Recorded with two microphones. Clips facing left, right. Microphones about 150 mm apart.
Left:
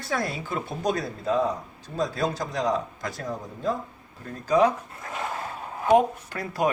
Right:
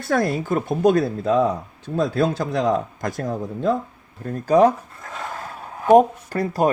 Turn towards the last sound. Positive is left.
turn(degrees=-40)  # may be behind; listen again after turning